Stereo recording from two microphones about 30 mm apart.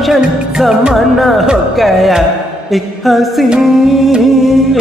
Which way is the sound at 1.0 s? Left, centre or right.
Centre.